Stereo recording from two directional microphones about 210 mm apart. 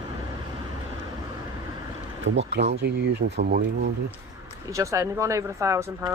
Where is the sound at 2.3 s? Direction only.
60° right (ahead or behind).